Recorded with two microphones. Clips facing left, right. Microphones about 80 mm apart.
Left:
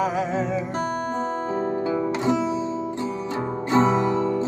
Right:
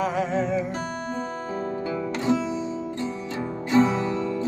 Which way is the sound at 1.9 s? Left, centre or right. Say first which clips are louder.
Even; left.